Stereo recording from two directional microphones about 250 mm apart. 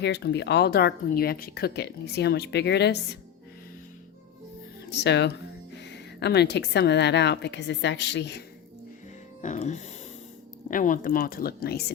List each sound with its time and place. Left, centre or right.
0.0 s speech: left
4.9 s a woman's voice: left
9.4 s speech: left